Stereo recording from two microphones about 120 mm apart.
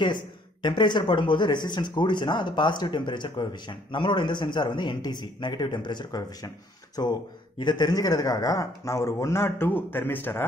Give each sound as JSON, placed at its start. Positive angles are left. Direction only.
{"t": 0.0, "sound": "speech", "side_deg": 40}